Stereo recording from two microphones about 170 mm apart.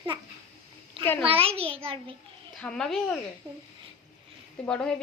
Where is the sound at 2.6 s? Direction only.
5° left (ahead or behind).